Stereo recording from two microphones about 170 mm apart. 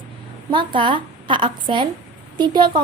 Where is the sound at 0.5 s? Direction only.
30° right (ahead or behind).